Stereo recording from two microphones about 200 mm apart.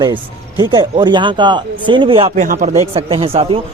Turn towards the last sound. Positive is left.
turn(degrees=-30)  # may be behind; listen again after turning